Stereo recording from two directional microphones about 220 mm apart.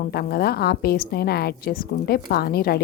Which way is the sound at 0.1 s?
45° left (ahead or behind).